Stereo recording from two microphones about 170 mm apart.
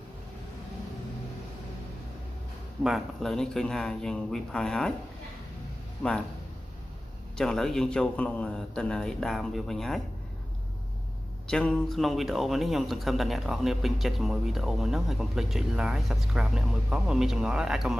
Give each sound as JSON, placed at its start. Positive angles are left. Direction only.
{"t": 2.8, "sound": "speech", "side_deg": 0}
{"t": 7.3, "sound": "speech", "side_deg": 5}
{"t": 11.4, "sound": "speech", "side_deg": 5}